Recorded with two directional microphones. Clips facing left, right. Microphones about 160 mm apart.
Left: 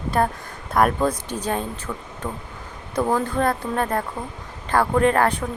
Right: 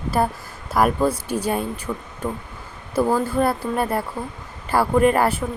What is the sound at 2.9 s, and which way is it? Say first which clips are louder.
Speech: right 2 dB; 5° right (ahead or behind).